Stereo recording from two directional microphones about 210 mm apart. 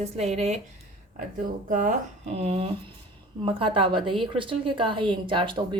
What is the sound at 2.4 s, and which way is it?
A woman's voice, 25° right (ahead or behind).